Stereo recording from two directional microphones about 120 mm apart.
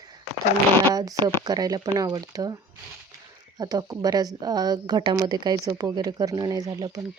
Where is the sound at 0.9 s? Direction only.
30° right (ahead or behind).